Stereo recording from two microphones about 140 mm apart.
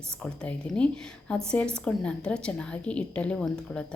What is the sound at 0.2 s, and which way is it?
A woman's voice, 5° left (ahead or behind).